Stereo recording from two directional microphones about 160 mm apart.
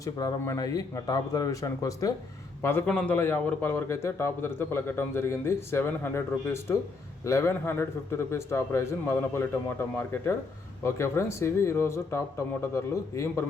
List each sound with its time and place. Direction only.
0.0 s a man's voice: 25° left (ahead or behind)